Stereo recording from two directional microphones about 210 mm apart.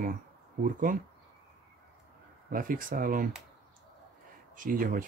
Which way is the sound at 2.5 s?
40° right (ahead or behind).